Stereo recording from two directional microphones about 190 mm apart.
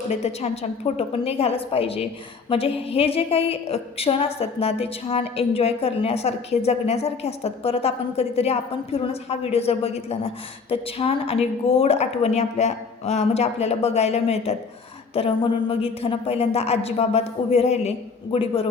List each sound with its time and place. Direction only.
0.2 s a woman's voice: 35° left (ahead or behind)